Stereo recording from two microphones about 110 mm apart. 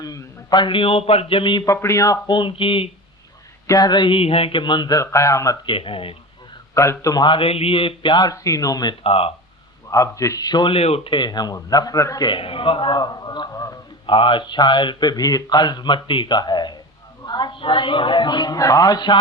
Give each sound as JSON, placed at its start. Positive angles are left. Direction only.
{"t": 0.0, "sound": "a man's voice", "side_deg": 35}
{"t": 1.6, "sound": "speech", "side_deg": 25}
{"t": 2.2, "sound": "a man's voice", "side_deg": 45}
{"t": 3.7, "sound": "a man's voice", "side_deg": 35}
{"t": 4.9, "sound": "speech", "side_deg": 30}
{"t": 5.6, "sound": "a man's voice", "side_deg": 55}
{"t": 6.7, "sound": "speech", "side_deg": 30}
{"t": 7.3, "sound": "a man's voice", "side_deg": 55}
{"t": 9.0, "sound": "speech", "side_deg": 60}
{"t": 9.9, "sound": "a man's voice", "side_deg": 30}
{"t": 10.8, "sound": "a man's voice", "side_deg": 65}
{"t": 12.3, "sound": "a man's voice", "side_deg": 55}
{"t": 14.1, "sound": "a man's voice", "side_deg": 50}